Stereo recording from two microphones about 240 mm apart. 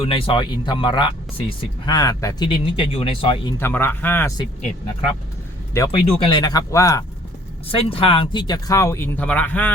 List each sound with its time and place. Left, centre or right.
0.0 s speech: left
3.6 s speech: centre
5.7 s speech: centre